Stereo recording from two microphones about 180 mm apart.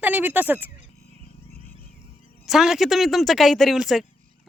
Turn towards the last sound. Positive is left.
turn(degrees=0)  # may be behind; listen again after turning